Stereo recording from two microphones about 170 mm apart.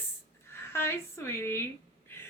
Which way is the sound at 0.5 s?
15° left (ahead or behind).